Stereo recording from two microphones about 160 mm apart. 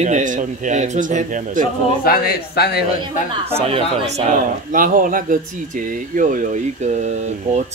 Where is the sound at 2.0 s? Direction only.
70° left (ahead or behind).